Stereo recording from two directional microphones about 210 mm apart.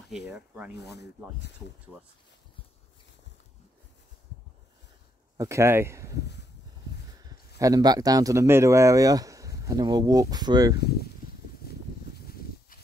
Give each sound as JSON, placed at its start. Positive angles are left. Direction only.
{"t": 0.7, "sound": "speech", "side_deg": 55}
{"t": 1.9, "sound": "speech", "side_deg": -10}
{"t": 5.4, "sound": "speech", "side_deg": -15}
{"t": 7.2, "sound": "speech", "side_deg": -15}